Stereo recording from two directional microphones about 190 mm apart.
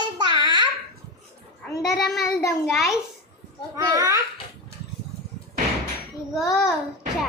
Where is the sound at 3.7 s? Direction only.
15° right (ahead or behind).